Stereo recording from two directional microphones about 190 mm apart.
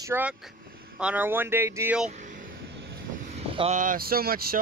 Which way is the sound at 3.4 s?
30° right (ahead or behind).